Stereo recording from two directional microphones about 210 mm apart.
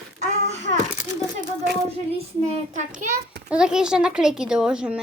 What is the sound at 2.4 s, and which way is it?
Speech, 35° right (ahead or behind).